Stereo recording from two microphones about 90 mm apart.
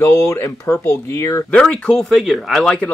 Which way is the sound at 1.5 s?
10° left (ahead or behind).